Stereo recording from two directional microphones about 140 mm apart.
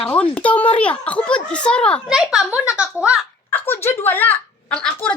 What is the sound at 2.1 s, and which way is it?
Speech, 5° right (ahead or behind).